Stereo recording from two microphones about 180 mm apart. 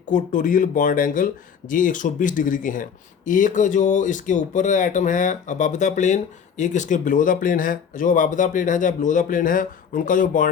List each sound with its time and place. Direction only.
0.1 s speech: 45° left (ahead or behind)